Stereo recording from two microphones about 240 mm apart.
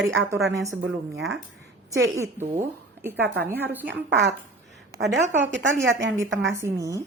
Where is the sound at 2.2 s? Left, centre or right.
Centre.